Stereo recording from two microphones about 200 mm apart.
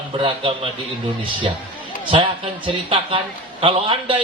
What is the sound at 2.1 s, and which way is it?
A man's voice, 25° right (ahead or behind).